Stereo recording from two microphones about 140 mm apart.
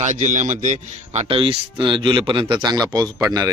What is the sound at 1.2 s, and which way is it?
A man's voice, 40° right (ahead or behind).